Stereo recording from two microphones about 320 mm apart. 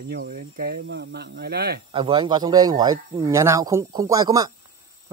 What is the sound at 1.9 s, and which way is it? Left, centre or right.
Speech, centre.